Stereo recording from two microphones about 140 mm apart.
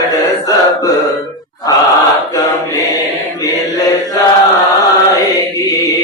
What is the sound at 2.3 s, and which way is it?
Chant, 25° left (ahead or behind).